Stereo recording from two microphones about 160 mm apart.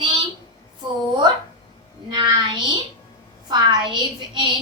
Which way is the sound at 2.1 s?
30° right (ahead or behind).